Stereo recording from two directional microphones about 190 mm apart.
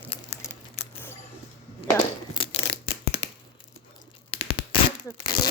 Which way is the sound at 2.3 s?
30° left (ahead or behind).